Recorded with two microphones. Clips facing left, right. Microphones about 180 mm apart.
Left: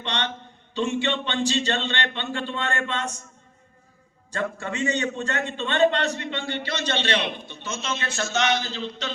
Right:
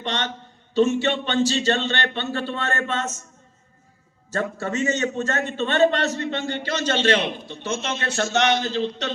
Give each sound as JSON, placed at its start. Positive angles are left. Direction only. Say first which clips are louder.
{"t": 0.0, "sound": "a man's voice", "louder": "right 2 dB", "side_deg": -40}
{"t": 4.3, "sound": "a man's voice", "louder": "right 3 dB", "side_deg": -40}
{"t": 7.6, "sound": "a man's voice", "louder": "right 4 dB", "side_deg": -60}